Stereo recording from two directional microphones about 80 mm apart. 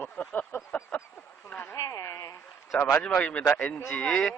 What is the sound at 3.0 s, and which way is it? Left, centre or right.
Speech, centre.